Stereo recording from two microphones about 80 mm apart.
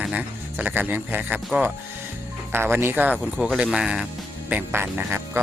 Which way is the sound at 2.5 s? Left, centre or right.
Right.